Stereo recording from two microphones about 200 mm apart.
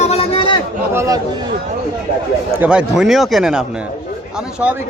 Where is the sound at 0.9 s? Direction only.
15° right (ahead or behind).